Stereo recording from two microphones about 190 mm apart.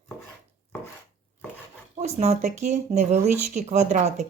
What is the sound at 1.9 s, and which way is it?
Speech, 35° right (ahead or behind).